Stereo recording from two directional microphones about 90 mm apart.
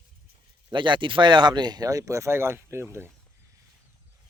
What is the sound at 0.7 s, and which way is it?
Speech, 60° right (ahead or behind).